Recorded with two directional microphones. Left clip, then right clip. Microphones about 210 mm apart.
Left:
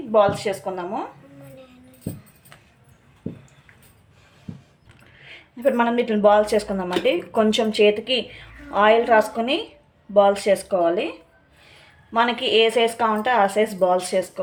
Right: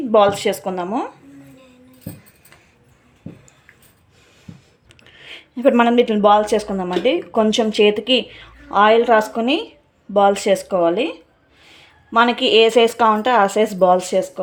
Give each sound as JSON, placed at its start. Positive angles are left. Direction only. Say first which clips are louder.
{"t": 0.1, "sound": "speech", "louder": "right 4 dB", "side_deg": -55}
{"t": 5.2, "sound": "speech", "louder": "right 5 dB", "side_deg": -40}
{"t": 12.1, "sound": "speech", "louder": "right 5 dB", "side_deg": -35}